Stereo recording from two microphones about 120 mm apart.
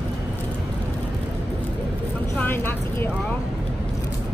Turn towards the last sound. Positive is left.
turn(degrees=20)  # may be behind; listen again after turning